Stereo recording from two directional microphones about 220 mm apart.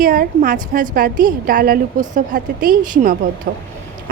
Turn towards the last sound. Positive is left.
turn(degrees=-40)  # may be behind; listen again after turning